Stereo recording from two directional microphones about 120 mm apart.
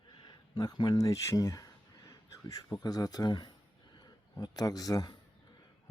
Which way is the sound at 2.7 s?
35° left (ahead or behind).